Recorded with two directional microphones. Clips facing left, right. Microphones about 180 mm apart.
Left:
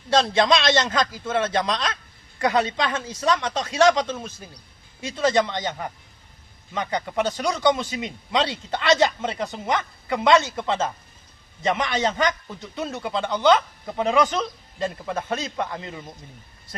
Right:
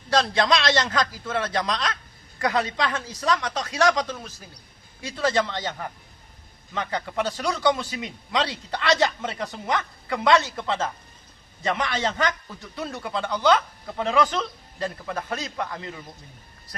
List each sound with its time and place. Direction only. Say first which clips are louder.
0.1 s a man's voice: left 2 dB; 25° left (ahead or behind)